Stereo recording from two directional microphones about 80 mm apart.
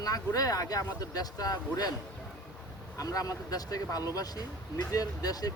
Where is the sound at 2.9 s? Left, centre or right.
Left.